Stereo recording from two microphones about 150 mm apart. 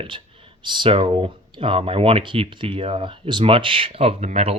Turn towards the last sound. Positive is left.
turn(degrees=-45)  # may be behind; listen again after turning